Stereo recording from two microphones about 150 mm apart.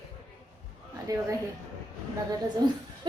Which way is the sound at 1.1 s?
25° right (ahead or behind).